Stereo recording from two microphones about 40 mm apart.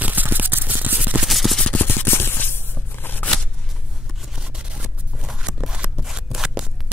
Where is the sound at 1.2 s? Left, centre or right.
Centre.